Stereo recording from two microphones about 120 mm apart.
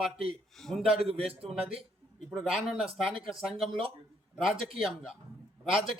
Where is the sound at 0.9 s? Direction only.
50° right (ahead or behind).